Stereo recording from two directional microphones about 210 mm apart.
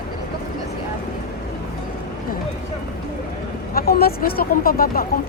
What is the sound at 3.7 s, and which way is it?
Speech, 45° left (ahead or behind).